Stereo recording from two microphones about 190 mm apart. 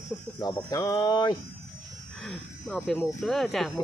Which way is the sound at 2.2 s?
5° left (ahead or behind).